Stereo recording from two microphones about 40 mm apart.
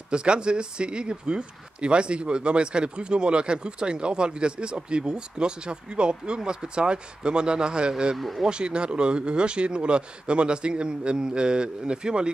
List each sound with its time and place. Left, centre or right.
0.1 s speech: right
8.2 s speech: centre
8.5 s speech: right